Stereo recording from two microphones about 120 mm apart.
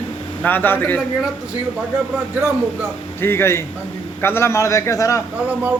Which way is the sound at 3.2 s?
20° left (ahead or behind).